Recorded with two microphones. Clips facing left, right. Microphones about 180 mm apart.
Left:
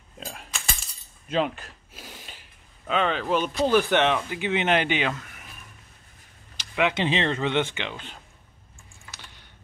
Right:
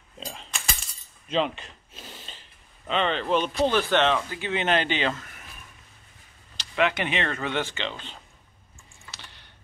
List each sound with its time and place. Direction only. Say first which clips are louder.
0.2 s keys jangling: even; 5° left (ahead or behind)
1.3 s gasp: even; 5° left (ahead or behind)
2.9 s speech: even; 5° left (ahead or behind)
6.5 s a sound: even; 10° left (ahead or behind)
6.9 s speech: left 3 dB; 25° left (ahead or behind); by 8.2 s 10° left (ahead or behind)